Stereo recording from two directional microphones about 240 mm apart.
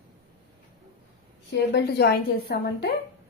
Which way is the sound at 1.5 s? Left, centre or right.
Left.